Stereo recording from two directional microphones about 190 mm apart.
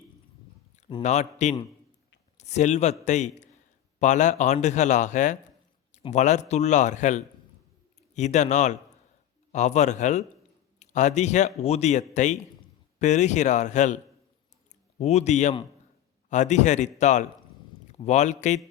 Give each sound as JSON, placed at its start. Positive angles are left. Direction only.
{"t": 1.0, "sound": "speech", "side_deg": 35}